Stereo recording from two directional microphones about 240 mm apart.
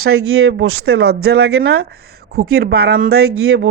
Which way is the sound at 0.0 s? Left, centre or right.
Right.